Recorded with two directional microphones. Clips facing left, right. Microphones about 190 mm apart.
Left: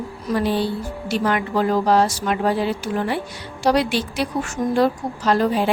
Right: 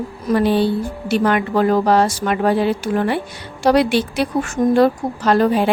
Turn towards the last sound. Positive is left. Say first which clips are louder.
# right 4 dB
turn(degrees=-60)  # may be behind; listen again after turning